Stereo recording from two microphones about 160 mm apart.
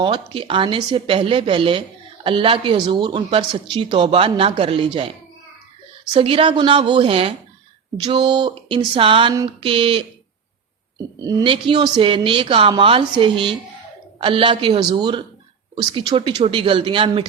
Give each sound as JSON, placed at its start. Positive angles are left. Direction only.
{"t": 0.0, "sound": "speech", "side_deg": -30}
{"t": 6.1, "sound": "speech", "side_deg": -35}
{"t": 11.2, "sound": "speech", "side_deg": -25}